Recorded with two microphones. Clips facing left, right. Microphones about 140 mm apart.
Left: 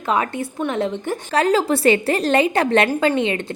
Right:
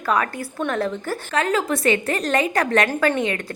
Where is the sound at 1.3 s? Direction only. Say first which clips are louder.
Left 4 dB; 30° left (ahead or behind).